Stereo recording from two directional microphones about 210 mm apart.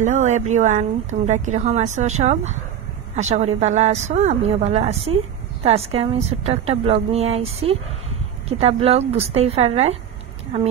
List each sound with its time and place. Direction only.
0.0 s a woman's voice: 35° right (ahead or behind)
8.5 s a woman's voice: 30° right (ahead or behind)